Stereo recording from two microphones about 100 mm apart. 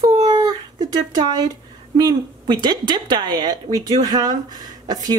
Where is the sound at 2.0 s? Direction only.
45° right (ahead or behind).